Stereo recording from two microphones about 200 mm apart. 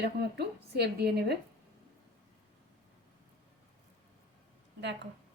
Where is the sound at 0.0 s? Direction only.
55° right (ahead or behind).